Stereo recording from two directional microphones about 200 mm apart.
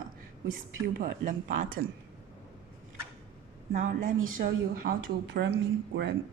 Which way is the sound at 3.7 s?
45° right (ahead or behind).